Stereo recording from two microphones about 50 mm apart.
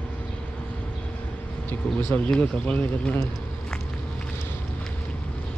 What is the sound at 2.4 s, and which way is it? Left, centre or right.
Speech, left.